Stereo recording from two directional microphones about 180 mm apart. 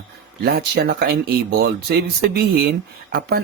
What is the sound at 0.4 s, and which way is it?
Speech, 60° right (ahead or behind).